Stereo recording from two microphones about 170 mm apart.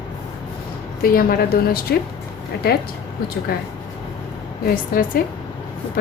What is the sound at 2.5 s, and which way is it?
Speech, 75° left (ahead or behind).